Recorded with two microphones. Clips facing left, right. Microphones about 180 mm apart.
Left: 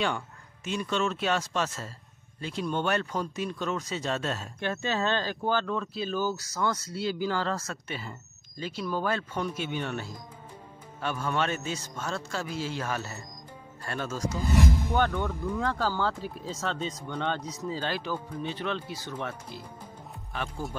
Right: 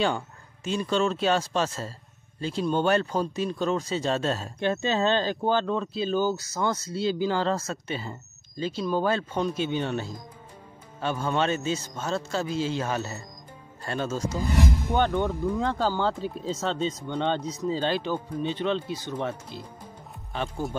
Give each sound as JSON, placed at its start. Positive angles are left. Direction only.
{"t": 0.7, "sound": "speech", "side_deg": -35}